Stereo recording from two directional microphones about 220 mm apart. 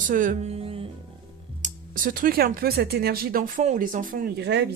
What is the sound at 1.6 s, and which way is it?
Speech, 40° right (ahead or behind).